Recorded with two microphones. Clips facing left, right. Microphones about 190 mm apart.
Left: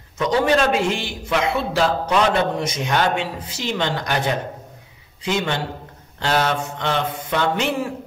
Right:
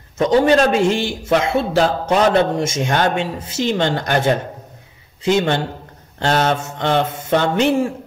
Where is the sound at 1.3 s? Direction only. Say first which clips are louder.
Right 4 dB; 45° right (ahead or behind).